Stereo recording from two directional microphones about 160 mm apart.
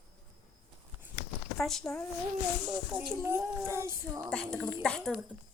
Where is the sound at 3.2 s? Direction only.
15° right (ahead or behind).